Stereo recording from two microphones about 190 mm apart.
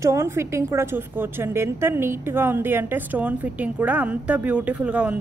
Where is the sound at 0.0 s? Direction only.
15° right (ahead or behind).